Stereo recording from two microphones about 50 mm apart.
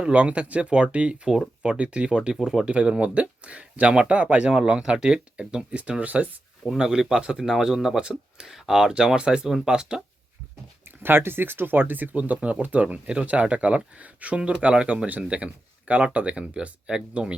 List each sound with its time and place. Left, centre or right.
0.0 s speech: right
2.3 s speech: centre
2.7 s speech: right
6.7 s speech: centre
10.8 s speech: right; by 17.3 s centre